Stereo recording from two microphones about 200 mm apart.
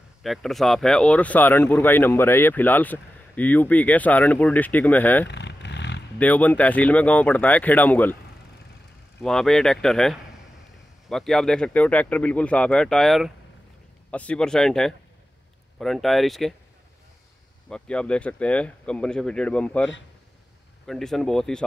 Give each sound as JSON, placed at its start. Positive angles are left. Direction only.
{"t": 0.2, "sound": "speech", "side_deg": 0}
{"t": 5.3, "sound": "vehicle", "side_deg": 60}
{"t": 6.1, "sound": "speech", "side_deg": 10}
{"t": 9.2, "sound": "speech", "side_deg": 5}
{"t": 17.6, "sound": "speech", "side_deg": 5}